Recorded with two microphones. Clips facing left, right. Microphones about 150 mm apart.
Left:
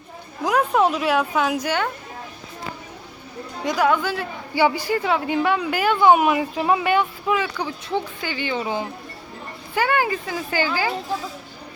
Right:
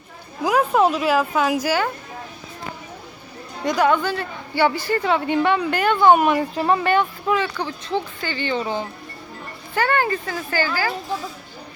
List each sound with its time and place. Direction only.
0.4 s a woman's voice: centre (ahead or behind)
3.6 s a woman's voice: centre (ahead or behind)